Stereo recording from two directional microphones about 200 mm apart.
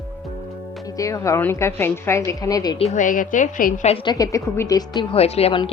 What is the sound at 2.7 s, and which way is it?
A woman's voice, 35° left (ahead or behind).